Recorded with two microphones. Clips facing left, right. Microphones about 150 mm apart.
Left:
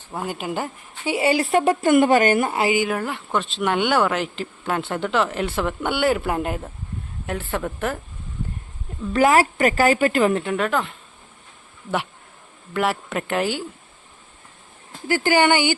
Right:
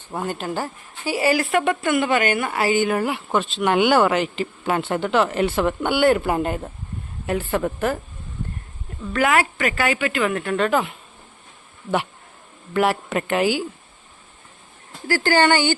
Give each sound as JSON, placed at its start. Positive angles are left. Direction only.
{"t": 0.1, "sound": "a woman's voice", "side_deg": 10}
{"t": 2.5, "sound": "speech", "side_deg": 20}
{"t": 2.7, "sound": "speech", "side_deg": 0}
{"t": 9.1, "sound": "a woman's voice", "side_deg": 35}
{"t": 10.6, "sound": "speech", "side_deg": -5}
{"t": 12.7, "sound": "speech", "side_deg": 0}
{"t": 15.0, "sound": "speech", "side_deg": 20}